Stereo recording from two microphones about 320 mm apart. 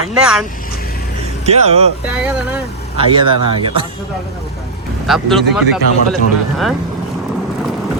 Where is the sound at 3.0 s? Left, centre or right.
Centre.